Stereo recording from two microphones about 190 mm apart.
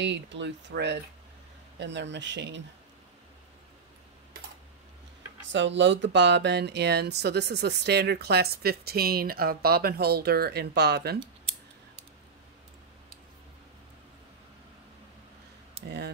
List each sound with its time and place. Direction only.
0.0 s speech: 70° right (ahead or behind)
5.5 s speech: 70° right (ahead or behind)